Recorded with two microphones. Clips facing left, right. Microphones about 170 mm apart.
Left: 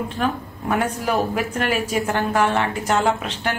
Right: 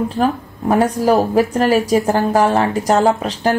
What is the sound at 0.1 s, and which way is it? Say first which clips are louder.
Speech: right 6 dB; 35° right (ahead or behind).